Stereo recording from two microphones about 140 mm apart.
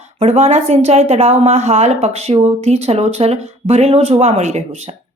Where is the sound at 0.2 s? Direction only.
50° right (ahead or behind).